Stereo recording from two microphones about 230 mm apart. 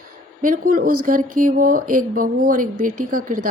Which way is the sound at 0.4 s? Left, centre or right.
Right.